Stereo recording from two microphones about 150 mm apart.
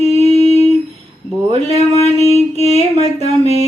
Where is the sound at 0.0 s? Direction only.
45° left (ahead or behind).